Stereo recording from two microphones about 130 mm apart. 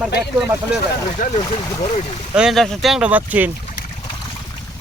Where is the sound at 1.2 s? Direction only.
90° left.